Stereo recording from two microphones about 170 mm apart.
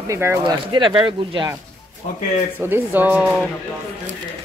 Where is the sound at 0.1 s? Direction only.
15° right (ahead or behind).